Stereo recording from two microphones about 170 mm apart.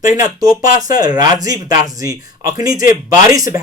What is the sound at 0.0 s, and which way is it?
Speech, 20° right (ahead or behind).